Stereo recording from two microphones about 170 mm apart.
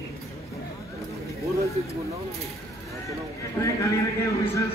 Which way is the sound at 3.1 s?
20° left (ahead or behind).